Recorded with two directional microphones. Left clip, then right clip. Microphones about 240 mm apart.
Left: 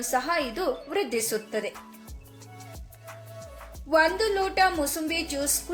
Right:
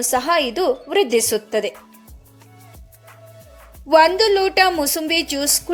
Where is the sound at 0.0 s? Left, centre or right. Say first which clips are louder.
Right 8 dB; right.